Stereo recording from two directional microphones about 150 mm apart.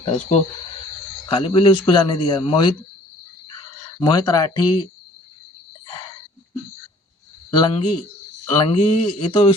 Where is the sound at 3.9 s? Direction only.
30° left (ahead or behind).